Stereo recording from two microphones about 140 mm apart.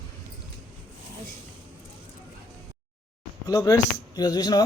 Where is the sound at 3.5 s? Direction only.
25° left (ahead or behind).